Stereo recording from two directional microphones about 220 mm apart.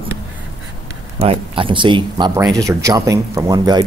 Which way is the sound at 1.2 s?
25° right (ahead or behind).